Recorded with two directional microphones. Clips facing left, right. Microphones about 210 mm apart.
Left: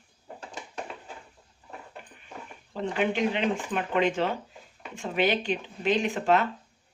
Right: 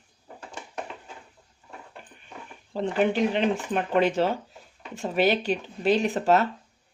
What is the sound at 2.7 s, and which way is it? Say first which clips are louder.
Speech: right 4 dB; 35° right (ahead or behind).